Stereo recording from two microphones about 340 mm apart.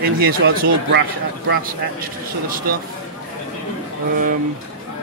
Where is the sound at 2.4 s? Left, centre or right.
Right.